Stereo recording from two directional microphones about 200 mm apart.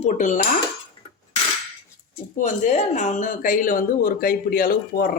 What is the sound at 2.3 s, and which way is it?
A woman's voice, 35° left (ahead or behind).